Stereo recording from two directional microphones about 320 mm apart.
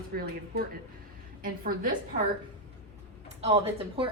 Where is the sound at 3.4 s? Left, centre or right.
Centre.